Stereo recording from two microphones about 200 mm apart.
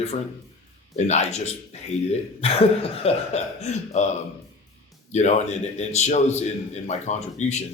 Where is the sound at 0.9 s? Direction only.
35° left (ahead or behind).